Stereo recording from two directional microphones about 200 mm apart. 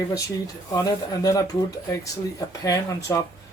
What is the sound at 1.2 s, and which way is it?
Speech, 15° left (ahead or behind).